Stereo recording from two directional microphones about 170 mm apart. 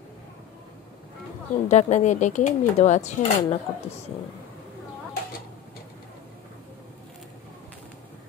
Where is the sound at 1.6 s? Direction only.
45° left (ahead or behind).